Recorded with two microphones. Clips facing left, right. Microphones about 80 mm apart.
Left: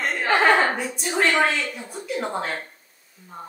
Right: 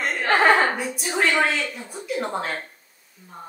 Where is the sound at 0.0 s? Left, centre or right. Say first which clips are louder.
Right 1 dB; centre.